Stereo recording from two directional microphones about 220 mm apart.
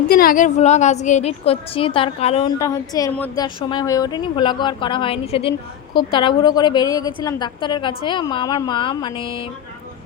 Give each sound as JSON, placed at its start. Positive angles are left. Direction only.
{"t": 0.1, "sound": "a woman's voice", "side_deg": 40}